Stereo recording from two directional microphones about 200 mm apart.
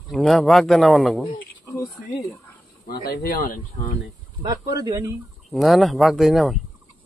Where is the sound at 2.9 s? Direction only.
50° left (ahead or behind).